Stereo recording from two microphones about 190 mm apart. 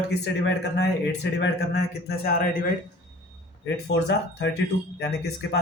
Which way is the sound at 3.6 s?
65° left (ahead or behind).